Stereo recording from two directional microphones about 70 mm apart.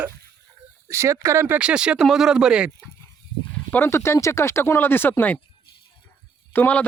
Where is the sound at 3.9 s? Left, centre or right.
Left.